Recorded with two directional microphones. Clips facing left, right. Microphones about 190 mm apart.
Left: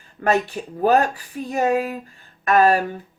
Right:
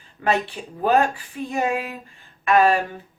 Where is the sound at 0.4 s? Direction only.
45° left (ahead or behind).